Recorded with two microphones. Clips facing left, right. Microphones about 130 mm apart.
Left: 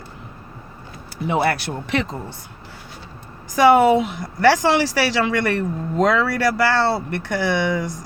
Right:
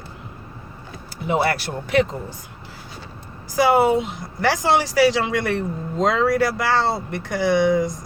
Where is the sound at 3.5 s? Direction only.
90° left.